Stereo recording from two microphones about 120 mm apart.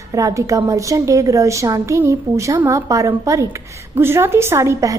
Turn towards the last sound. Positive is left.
turn(degrees=-25)  # may be behind; listen again after turning